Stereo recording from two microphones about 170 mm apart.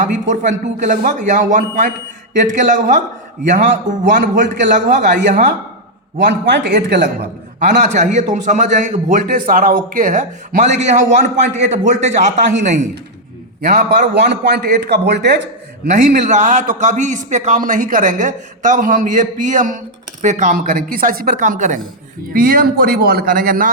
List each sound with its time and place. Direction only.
0.0 s a man's voice: 45° right (ahead or behind)
3.6 s speech: 90° right
4.7 s a man's voice: 50° right (ahead or behind)
6.1 s speech: 90° right
7.9 s a man's voice: 45° right (ahead or behind)
13.6 s a man's voice: 65° right (ahead or behind); by 15.4 s 85° right
15.9 s a man's voice: 45° right (ahead or behind)